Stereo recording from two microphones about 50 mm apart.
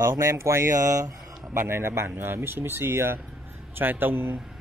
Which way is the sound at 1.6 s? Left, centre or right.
Right.